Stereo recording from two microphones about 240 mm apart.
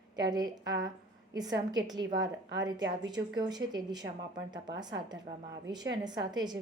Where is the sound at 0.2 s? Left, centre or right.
Centre.